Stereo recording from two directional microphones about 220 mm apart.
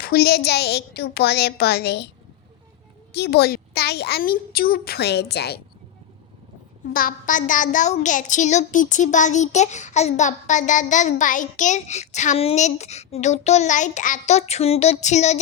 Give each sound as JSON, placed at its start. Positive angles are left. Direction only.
{"t": 0.0, "sound": "a woman's voice", "side_deg": 45}
{"t": 3.1, "sound": "a child's voice", "side_deg": 50}
{"t": 6.9, "sound": "a child's voice", "side_deg": 40}